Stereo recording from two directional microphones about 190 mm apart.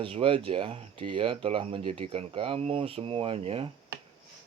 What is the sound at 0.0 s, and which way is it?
Speech, 30° right (ahead or behind).